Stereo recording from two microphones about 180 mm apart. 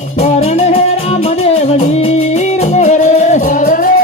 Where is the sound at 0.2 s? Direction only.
35° left (ahead or behind).